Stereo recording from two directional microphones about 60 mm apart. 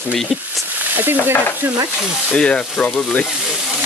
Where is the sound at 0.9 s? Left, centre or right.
Right.